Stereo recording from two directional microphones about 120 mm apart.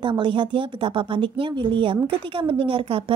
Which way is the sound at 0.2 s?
45° right (ahead or behind).